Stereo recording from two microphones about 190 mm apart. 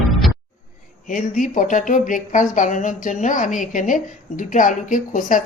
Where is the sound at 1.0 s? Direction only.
45° left (ahead or behind).